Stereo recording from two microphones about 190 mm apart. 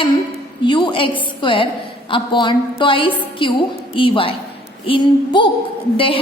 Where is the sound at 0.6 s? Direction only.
25° left (ahead or behind).